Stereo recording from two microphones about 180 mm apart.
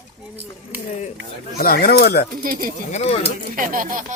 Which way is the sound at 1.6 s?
55° left (ahead or behind).